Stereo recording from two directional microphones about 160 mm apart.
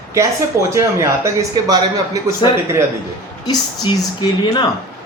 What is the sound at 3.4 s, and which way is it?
Speech, 30° left (ahead or behind).